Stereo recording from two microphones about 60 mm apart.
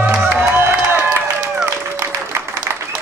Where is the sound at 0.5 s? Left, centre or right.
Right.